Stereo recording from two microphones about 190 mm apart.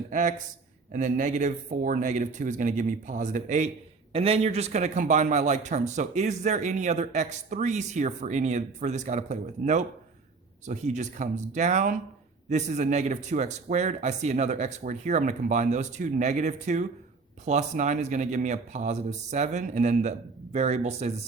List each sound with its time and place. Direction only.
0.1 s a man's voice: 40° right (ahead or behind)